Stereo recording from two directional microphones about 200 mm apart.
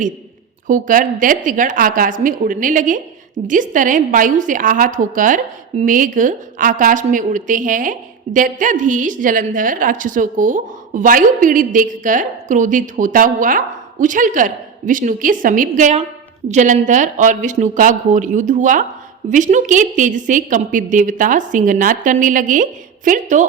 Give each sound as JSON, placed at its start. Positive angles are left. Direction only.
{"t": 0.7, "sound": "a woman's voice", "side_deg": -40}